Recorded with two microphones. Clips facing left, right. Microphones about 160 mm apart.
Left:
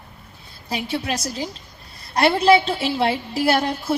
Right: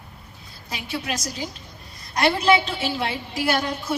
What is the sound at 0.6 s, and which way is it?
A woman's voice, 30° left (ahead or behind).